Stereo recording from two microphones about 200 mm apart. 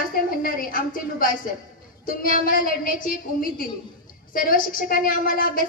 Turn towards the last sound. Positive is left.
turn(degrees=45)  # may be behind; listen again after turning